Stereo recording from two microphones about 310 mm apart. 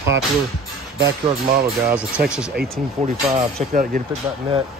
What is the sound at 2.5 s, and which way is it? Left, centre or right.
Speech, right.